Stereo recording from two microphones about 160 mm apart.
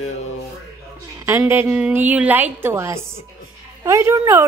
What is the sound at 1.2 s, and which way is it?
A woman's voice, 15° right (ahead or behind).